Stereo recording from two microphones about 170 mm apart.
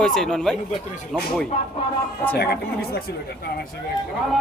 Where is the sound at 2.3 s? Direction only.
70° left (ahead or behind).